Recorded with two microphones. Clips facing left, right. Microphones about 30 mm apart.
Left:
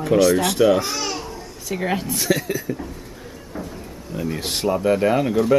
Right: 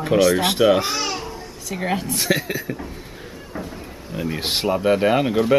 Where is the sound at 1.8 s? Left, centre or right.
Centre.